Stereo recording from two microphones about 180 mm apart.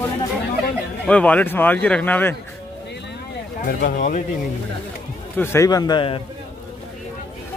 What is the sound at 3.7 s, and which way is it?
Speech, 50° left (ahead or behind).